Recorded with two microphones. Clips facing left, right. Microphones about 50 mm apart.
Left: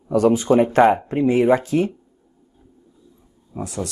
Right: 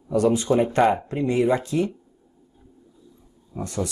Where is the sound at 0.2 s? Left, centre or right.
Left.